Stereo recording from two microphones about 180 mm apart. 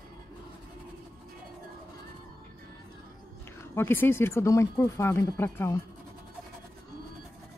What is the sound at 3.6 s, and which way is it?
Speech, 10° left (ahead or behind).